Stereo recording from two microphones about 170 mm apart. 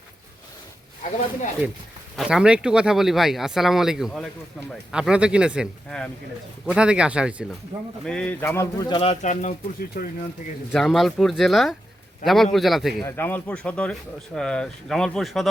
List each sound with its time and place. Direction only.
2.1 s speech: 5° right (ahead or behind)
8.0 s speech: 5° left (ahead or behind)
8.9 s speech: 35° left (ahead or behind); by 10.1 s 50° left (ahead or behind)
10.8 s speech: centre (ahead or behind)
13.1 s speech: 10° left (ahead or behind)